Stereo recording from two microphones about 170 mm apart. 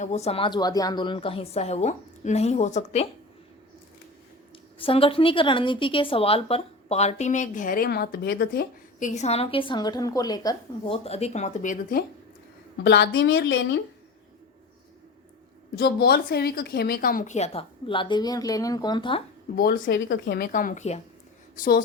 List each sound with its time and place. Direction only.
0.0 s a woman's voice: 40° left (ahead or behind)
4.8 s a woman's voice: 35° left (ahead or behind)
10.9 s speech: 35° left (ahead or behind); by 12.0 s 55° left (ahead or behind)
12.8 s a woman's voice: 90° left
15.8 s a woman's voice: 65° left (ahead or behind); by 19.2 s 30° left (ahead or behind)
19.5 s a woman's voice: 60° left (ahead or behind)